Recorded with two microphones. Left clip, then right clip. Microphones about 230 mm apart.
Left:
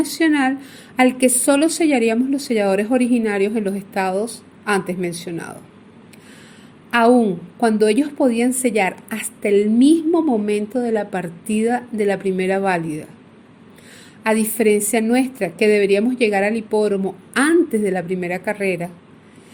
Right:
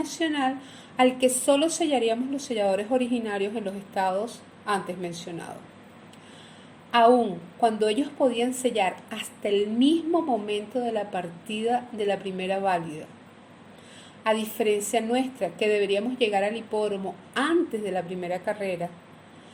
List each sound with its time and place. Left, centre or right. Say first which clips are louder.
0.0 s a woman's voice: left 9 dB; left
6.9 s a woman's voice: left 4 dB; left
14.3 s a woman's voice: left 7 dB; left